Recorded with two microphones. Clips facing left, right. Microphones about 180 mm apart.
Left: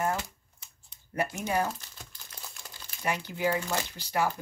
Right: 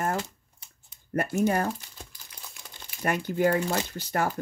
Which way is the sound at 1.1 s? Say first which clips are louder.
Right 4 dB; 50° right (ahead or behind).